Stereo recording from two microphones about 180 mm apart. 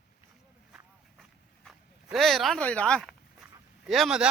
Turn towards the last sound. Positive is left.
turn(degrees=0)  # may be behind; listen again after turning